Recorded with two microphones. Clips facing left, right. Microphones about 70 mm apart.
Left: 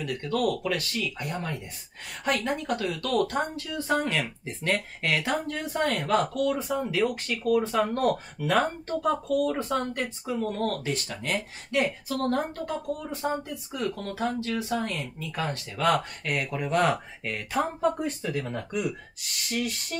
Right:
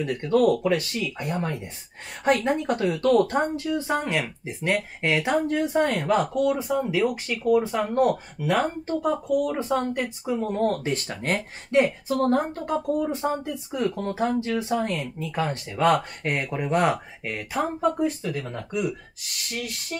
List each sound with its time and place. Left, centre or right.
0.0 s speech: right
3.5 s speech: centre
10.8 s speech: right; by 18.9 s centre
19.5 s a sound: centre